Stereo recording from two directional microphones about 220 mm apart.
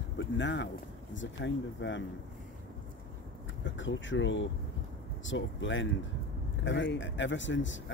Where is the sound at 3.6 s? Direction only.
55° left (ahead or behind).